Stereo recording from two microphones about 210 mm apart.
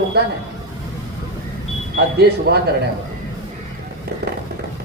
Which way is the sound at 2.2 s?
50° right (ahead or behind).